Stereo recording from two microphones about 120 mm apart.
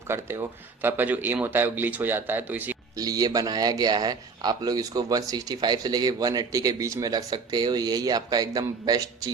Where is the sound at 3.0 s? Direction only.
30° right (ahead or behind).